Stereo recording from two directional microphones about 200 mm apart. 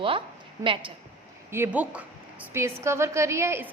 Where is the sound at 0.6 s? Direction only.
25° right (ahead or behind).